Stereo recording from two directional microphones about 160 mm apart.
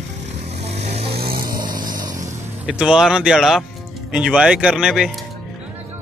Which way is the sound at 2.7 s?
5° right (ahead or behind).